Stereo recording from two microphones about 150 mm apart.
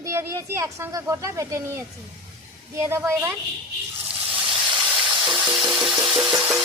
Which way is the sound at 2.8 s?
15° right (ahead or behind).